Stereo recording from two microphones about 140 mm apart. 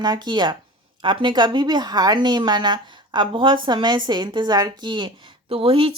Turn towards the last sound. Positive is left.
turn(degrees=-40)  # may be behind; listen again after turning